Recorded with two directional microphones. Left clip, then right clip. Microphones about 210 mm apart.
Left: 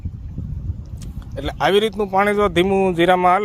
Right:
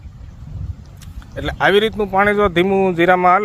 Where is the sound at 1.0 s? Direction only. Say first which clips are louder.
Right 3 dB; 10° left (ahead or behind).